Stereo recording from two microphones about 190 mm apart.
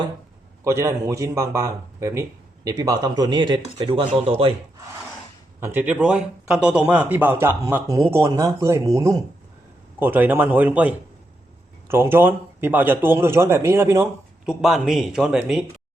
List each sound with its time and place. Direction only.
0.6 s speech: 15° right (ahead or behind); by 4.5 s 30° right (ahead or behind)
5.5 s speech: 10° right (ahead or behind)
14.4 s speech: centre (ahead or behind)